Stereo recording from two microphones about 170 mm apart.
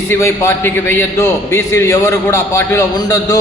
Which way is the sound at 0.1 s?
15° left (ahead or behind).